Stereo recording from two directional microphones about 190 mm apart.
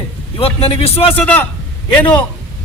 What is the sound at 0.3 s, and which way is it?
Speech, 30° left (ahead or behind).